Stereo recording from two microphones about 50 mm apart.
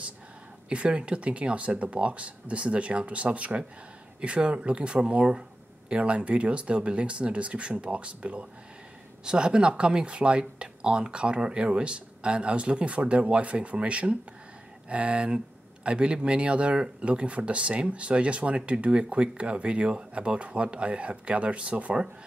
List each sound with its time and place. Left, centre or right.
0.7 s speech: right